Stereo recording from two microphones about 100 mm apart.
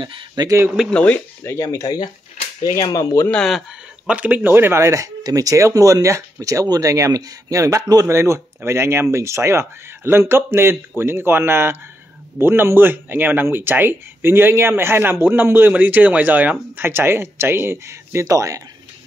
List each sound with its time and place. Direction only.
0.4 s speech: 35° right (ahead or behind)
0.8 s speech: 10° left (ahead or behind)
1.4 s speech: 30° left (ahead or behind)
3.3 s speech: 10° left (ahead or behind)
4.1 s speech: 15° right (ahead or behind); by 18.6 s 35° right (ahead or behind)